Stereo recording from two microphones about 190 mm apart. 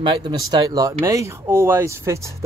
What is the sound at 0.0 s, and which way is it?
Speech, 25° right (ahead or behind).